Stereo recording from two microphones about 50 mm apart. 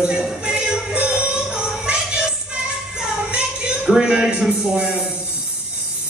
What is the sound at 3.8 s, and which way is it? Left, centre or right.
A man's voice, centre.